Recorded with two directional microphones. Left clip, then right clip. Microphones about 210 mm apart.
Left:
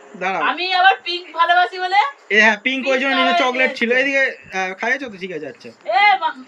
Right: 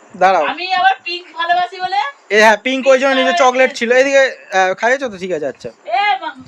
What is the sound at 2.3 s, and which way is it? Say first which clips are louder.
A man's voice: right 8 dB; 25° right (ahead or behind).